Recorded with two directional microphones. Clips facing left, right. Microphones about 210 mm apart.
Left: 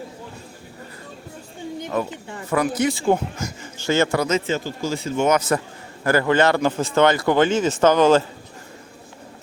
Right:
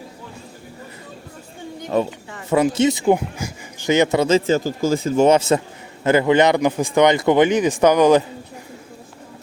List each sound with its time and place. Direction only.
1.9 s speech: 30° right (ahead or behind); by 8.2 s 15° right (ahead or behind)